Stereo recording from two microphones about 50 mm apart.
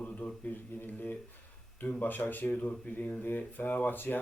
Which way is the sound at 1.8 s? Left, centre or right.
Left.